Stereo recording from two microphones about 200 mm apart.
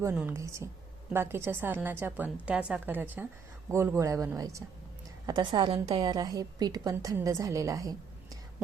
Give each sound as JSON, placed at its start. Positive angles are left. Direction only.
{"t": 0.0, "sound": "a woman's voice", "side_deg": -10}